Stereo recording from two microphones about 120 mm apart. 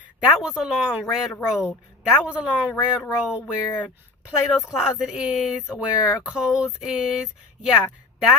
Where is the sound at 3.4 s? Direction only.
15° left (ahead or behind).